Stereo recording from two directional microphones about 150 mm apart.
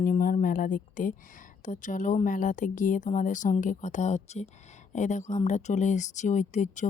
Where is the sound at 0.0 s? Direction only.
70° left (ahead or behind).